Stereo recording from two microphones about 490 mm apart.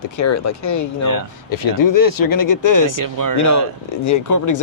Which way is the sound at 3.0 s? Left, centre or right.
Right.